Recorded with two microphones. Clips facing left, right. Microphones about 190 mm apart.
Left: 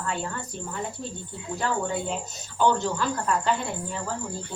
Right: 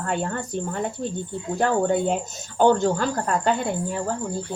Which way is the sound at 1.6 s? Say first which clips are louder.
Right 7 dB; 50° right (ahead or behind).